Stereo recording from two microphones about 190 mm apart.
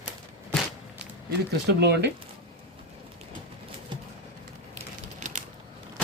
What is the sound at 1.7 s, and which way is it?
Speech, 60° right (ahead or behind).